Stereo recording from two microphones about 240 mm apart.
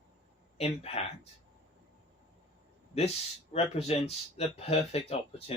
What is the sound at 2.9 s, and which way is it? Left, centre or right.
Speech, left.